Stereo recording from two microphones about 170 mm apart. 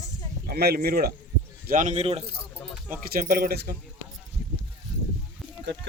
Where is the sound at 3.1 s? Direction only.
55° right (ahead or behind).